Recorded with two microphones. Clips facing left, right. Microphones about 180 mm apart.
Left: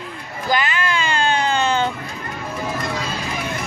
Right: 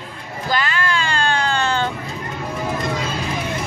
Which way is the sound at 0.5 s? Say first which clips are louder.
Left 1 dB; 15° left (ahead or behind).